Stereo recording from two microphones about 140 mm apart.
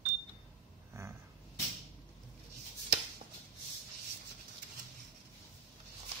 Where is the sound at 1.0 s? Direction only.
20° right (ahead or behind).